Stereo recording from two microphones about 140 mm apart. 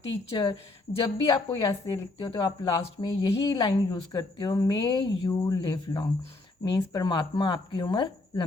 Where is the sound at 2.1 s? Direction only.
35° left (ahead or behind).